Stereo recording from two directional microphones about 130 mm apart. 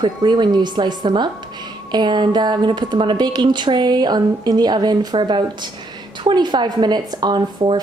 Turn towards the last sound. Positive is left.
turn(degrees=-35)  # may be behind; listen again after turning